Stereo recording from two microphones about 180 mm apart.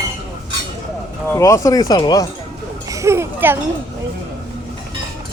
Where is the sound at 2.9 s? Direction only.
15° right (ahead or behind).